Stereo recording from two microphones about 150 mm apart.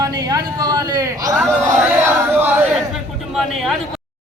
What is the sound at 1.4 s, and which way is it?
Speech, centre (ahead or behind).